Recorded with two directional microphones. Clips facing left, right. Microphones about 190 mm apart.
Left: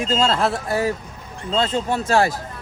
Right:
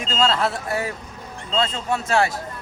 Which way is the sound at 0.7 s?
35° left (ahead or behind).